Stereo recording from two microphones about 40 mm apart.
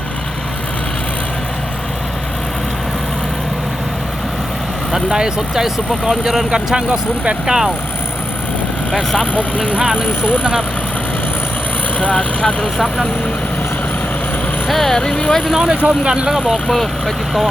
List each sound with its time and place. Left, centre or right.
5.0 s speech: centre
6.7 s speech: right
7.4 s speech: centre
9.7 s speech: right
10.1 s speech: left
11.9 s speech: left
14.7 s speech: centre
14.9 s speech: centre
15.5 s speech: centre